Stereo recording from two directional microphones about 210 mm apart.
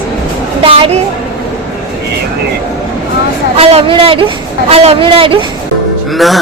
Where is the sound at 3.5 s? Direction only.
25° right (ahead or behind).